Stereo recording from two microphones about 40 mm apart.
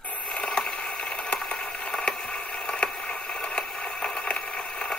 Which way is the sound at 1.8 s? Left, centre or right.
Centre.